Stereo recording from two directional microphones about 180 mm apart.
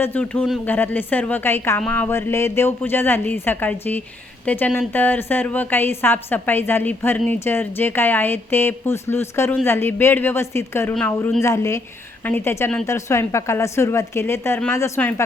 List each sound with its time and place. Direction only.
0.0 s a woman's voice: 10° left (ahead or behind)